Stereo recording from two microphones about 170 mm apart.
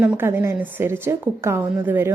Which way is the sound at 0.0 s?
10° right (ahead or behind).